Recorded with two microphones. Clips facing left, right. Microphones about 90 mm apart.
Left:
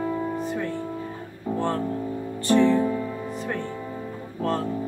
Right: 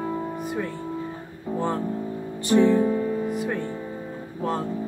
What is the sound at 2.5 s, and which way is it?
Music, 15° right (ahead or behind).